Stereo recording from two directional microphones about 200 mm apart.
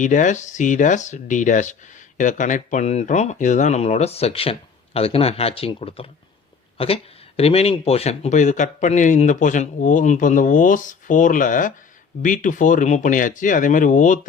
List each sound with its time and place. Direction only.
0.0 s speech: 40° left (ahead or behind)